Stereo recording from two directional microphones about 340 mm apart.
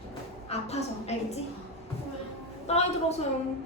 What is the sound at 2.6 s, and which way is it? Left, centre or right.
Speech, centre.